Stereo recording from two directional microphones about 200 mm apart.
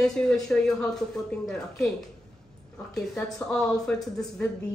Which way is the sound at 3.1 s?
5° left (ahead or behind).